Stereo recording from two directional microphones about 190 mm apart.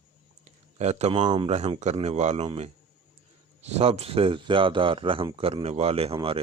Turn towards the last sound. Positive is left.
turn(degrees=-30)  # may be behind; listen again after turning